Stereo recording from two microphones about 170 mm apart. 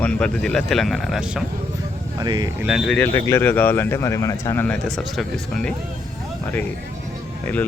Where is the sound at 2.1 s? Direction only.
25° right (ahead or behind).